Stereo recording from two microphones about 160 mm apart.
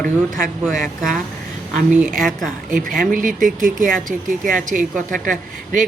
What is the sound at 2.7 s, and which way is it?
Speech, 55° right (ahead or behind).